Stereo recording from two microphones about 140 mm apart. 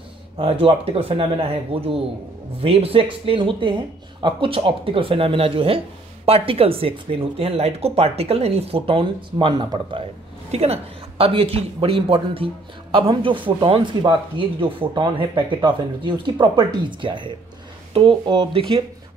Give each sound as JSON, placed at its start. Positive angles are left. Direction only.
{"t": 0.4, "sound": "speech", "side_deg": -40}
{"t": 10.5, "sound": "speech", "side_deg": -45}